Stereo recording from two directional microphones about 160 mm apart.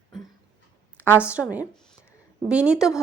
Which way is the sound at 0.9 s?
10° right (ahead or behind).